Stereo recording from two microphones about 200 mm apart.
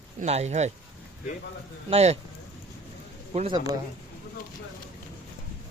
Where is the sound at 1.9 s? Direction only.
30° right (ahead or behind).